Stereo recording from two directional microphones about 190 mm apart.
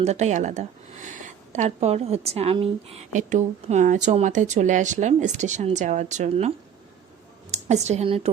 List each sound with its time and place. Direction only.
0.0 s speech: 35° right (ahead or behind)
7.5 s a woman's voice: 35° right (ahead or behind)